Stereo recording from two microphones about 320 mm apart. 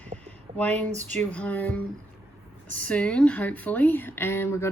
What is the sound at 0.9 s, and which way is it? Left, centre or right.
Speech, right.